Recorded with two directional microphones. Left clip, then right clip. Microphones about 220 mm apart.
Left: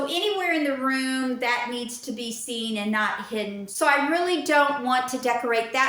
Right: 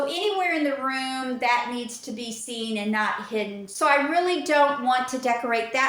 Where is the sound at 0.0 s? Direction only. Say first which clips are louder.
Right 1 dB; 5° left (ahead or behind).